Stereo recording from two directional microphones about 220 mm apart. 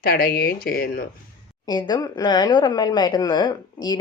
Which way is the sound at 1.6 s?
20° left (ahead or behind).